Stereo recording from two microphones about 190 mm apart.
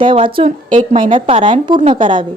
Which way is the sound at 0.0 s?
25° right (ahead or behind).